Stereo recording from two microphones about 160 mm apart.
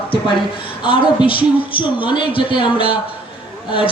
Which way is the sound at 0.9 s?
30° left (ahead or behind).